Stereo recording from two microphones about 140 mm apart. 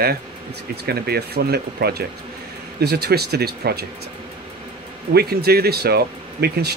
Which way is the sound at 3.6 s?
90° right.